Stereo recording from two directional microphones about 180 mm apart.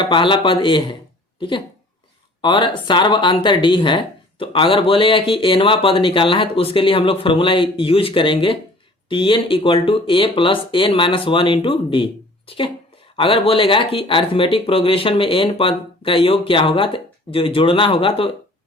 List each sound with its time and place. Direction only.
0.0 s speech: 25° left (ahead or behind)